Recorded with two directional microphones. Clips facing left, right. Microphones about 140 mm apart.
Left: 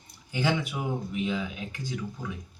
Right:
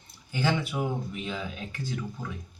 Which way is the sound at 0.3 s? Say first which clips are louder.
Even; 15° left (ahead or behind).